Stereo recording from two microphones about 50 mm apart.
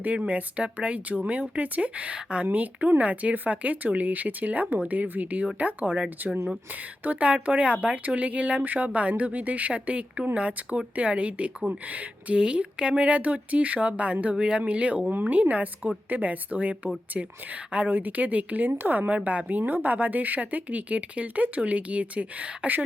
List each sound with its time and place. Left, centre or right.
0.0 s speech: right
2.5 s a woman's voice: right
14.3 s a woman's voice: centre
17.9 s a woman's voice: right
18.7 s a woman's voice: right